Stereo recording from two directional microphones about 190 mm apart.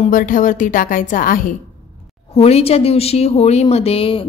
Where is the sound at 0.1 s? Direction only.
45° left (ahead or behind).